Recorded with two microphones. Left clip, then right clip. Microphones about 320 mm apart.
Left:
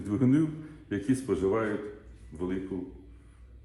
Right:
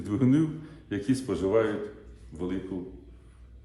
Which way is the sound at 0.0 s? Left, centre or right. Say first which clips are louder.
Right 1 dB; centre.